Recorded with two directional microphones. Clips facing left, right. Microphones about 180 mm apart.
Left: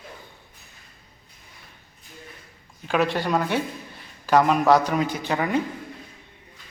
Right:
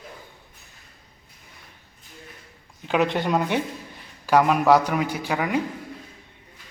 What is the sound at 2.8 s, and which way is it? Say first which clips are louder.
Speech: right 1 dB; 20° right (ahead or behind).